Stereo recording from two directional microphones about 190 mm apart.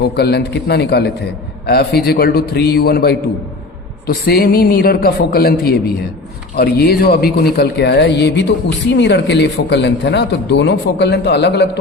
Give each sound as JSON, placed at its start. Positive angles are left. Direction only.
{"t": 0.0, "sound": "a man's voice", "side_deg": 60}